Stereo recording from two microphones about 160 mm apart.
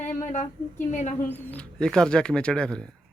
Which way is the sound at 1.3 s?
10° left (ahead or behind).